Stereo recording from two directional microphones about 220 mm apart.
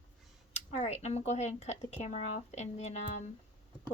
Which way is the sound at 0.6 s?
30° left (ahead or behind).